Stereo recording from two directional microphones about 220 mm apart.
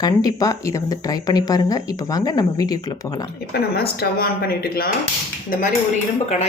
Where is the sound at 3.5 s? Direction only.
45° left (ahead or behind).